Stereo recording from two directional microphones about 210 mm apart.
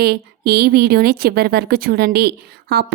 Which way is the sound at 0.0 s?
50° right (ahead or behind).